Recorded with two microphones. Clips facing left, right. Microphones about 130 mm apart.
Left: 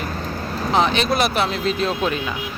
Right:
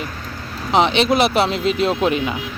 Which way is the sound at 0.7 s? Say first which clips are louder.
Right 3 dB; 25° right (ahead or behind).